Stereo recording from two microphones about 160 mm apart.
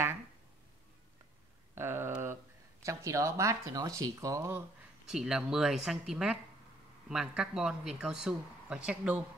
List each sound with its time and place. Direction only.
1.8 s a sound: 15° right (ahead or behind)
2.8 s speech: 20° right (ahead or behind)
5.0 s speech: 5° right (ahead or behind)